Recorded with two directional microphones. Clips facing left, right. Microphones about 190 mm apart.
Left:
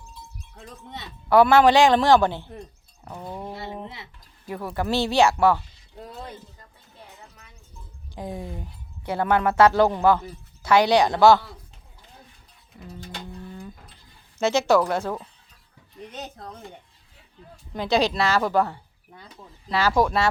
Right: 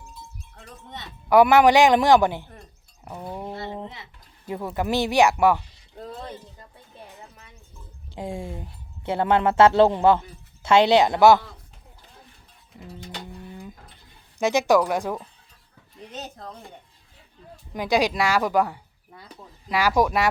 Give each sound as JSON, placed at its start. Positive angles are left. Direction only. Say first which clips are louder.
{"t": 1.3, "sound": "speech", "louder": "right 1 dB", "side_deg": -15}
{"t": 4.4, "sound": "speech", "louder": "right 1 dB", "side_deg": -20}
{"t": 8.1, "sound": "speech", "louder": "right 1 dB", "side_deg": -25}
{"t": 12.8, "sound": "speech", "louder": "even", "side_deg": -15}
{"t": 17.7, "sound": "speech", "louder": "even", "side_deg": -10}